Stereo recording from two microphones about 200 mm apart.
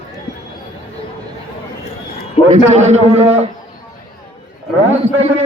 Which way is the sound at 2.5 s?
35° right (ahead or behind).